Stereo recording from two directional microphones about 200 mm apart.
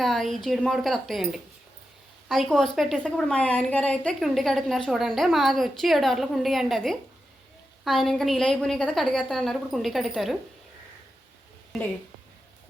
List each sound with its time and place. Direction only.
0.0 s a woman's voice: centre (ahead or behind)